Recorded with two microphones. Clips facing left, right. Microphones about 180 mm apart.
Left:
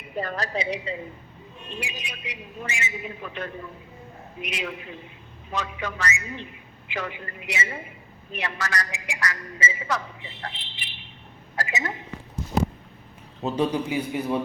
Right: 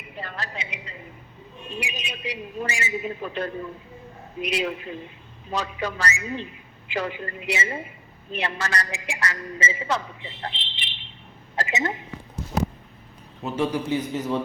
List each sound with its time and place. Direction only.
0.2 s a woman's voice: 40° left (ahead or behind)
1.8 s a woman's voice: 20° right (ahead or behind)
2.2 s a man's voice: 35° right (ahead or behind)
13.4 s a man's voice: 20° left (ahead or behind)